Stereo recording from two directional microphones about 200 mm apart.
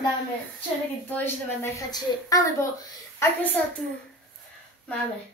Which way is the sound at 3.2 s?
15° left (ahead or behind).